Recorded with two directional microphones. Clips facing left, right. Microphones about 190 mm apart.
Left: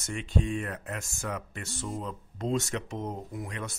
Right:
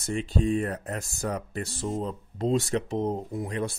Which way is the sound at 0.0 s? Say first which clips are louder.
Right 4 dB; 35° right (ahead or behind).